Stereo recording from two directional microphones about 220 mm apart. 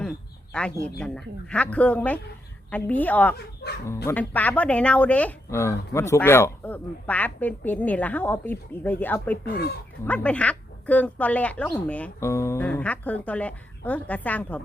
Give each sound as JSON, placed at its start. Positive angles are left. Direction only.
{"t": 0.9, "sound": "speech", "side_deg": 5}
{"t": 3.3, "sound": "speech", "side_deg": 45}
{"t": 3.8, "sound": "speech", "side_deg": 10}